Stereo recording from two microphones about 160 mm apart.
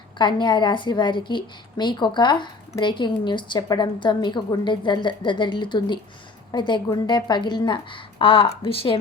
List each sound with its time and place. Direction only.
0.2 s a woman's voice: 30° left (ahead or behind)